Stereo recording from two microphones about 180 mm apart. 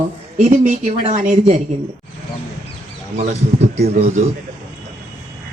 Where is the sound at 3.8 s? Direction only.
40° right (ahead or behind).